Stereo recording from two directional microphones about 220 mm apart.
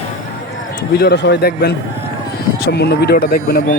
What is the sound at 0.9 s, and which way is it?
Speech, 45° left (ahead or behind).